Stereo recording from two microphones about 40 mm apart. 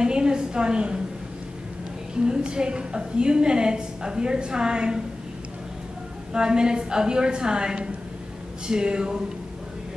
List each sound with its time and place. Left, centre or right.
0.0 s a sound: right
2.2 s a woman's voice: right
6.3 s a woman's voice: right